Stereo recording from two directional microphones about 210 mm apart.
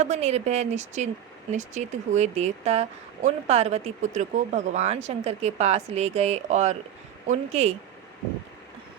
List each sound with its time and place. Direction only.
0.0 s speech: 30° right (ahead or behind)